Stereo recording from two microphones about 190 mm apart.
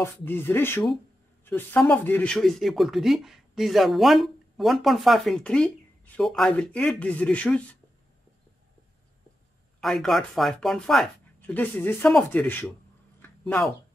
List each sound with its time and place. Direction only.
0.0 s speech: 10° left (ahead or behind)
9.8 s speech: centre (ahead or behind)
13.2 s a sound: 10° left (ahead or behind)